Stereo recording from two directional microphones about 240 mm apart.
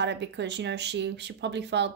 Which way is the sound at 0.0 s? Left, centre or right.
Right.